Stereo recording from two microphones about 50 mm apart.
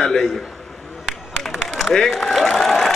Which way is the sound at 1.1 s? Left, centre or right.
Centre.